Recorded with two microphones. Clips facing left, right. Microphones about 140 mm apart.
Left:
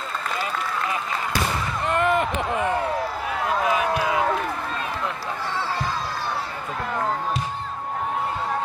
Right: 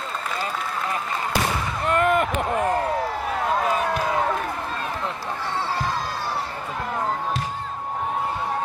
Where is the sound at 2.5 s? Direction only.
45° right (ahead or behind).